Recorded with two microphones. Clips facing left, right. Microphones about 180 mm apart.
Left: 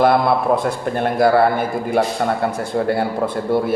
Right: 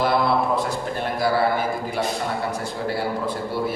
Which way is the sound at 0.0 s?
55° left (ahead or behind).